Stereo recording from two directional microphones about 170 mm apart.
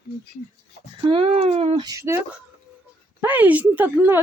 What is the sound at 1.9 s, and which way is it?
Speech, 15° right (ahead or behind).